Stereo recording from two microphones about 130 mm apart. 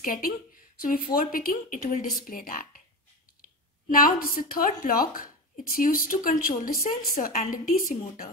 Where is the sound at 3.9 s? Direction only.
90° left.